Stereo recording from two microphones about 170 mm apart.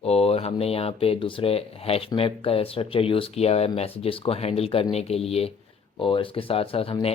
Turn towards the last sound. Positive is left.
turn(degrees=30)  # may be behind; listen again after turning